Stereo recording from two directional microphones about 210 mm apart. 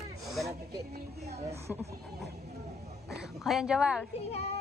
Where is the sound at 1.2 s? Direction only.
30° right (ahead or behind).